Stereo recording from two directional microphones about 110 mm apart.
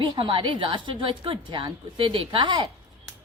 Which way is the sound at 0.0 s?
50° right (ahead or behind).